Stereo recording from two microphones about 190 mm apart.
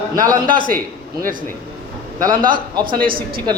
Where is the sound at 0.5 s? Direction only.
45° right (ahead or behind).